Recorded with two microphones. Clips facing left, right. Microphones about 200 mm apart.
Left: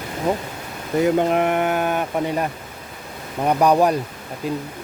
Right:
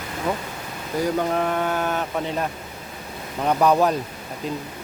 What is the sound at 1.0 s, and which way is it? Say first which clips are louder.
Speech: left 5 dB; 20° left (ahead or behind).